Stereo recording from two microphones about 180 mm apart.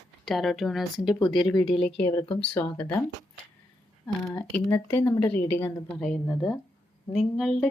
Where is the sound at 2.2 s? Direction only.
30° left (ahead or behind).